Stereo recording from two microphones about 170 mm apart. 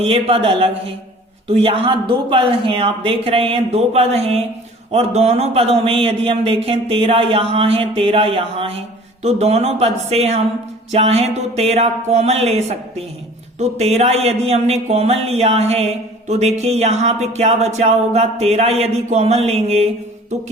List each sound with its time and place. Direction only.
0.0 s speech: 35° right (ahead or behind)